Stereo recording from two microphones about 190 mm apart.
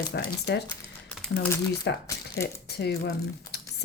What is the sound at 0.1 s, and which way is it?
Speech, 60° left (ahead or behind).